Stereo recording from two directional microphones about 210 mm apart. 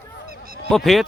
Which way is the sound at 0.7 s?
Centre (ahead or behind).